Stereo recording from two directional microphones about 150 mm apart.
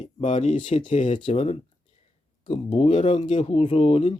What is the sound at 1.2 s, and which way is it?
Speech, 40° left (ahead or behind).